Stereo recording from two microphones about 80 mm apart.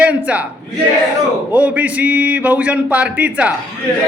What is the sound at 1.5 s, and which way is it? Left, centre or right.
A man's voice, centre.